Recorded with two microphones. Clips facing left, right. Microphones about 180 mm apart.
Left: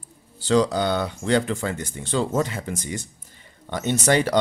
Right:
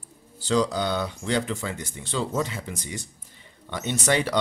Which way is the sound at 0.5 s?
55° left (ahead or behind).